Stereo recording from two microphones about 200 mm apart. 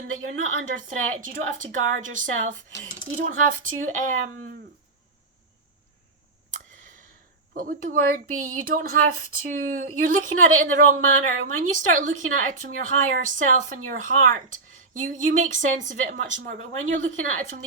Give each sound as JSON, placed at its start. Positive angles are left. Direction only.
{"t": 0.1, "sound": "a woman's voice", "side_deg": -90}
{"t": 0.6, "sound": "speech", "side_deg": -40}
{"t": 7.6, "sound": "speech", "side_deg": -45}